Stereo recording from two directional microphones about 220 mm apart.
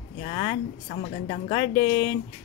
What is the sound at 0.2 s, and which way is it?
A woman's voice, 25° left (ahead or behind).